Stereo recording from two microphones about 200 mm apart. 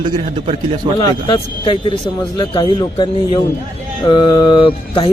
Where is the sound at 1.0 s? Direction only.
25° left (ahead or behind).